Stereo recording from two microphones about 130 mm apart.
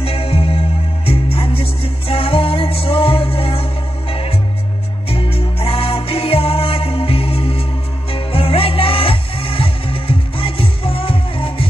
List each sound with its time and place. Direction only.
0.0 s music: 50° left (ahead or behind)